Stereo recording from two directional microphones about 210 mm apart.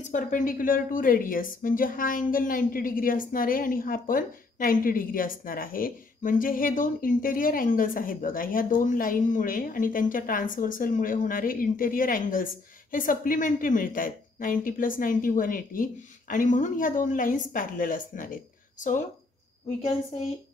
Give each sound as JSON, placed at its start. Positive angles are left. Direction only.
{"t": 0.0, "sound": "a woman's voice", "side_deg": 40}